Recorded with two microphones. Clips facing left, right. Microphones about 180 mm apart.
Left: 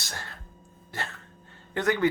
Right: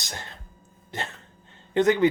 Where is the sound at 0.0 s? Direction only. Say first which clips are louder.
Right 2 dB; 20° right (ahead or behind).